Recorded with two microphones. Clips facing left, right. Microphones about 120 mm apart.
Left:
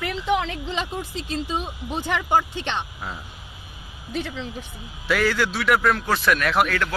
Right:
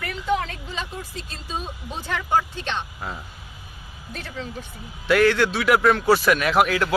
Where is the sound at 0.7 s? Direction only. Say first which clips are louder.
Left 4 dB; 85° left.